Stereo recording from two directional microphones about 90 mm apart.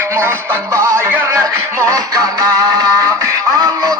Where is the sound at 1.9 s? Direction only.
40° right (ahead or behind).